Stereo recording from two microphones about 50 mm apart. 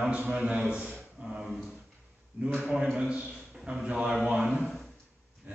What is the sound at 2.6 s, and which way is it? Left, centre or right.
A man's voice, right.